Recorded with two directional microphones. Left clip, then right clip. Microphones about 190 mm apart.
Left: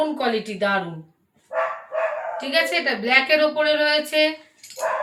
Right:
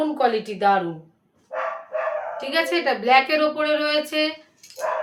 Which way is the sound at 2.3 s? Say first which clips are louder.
Left 2 dB; 35° right (ahead or behind).